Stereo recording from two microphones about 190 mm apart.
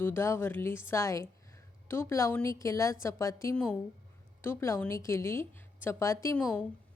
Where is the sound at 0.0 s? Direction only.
10° left (ahead or behind).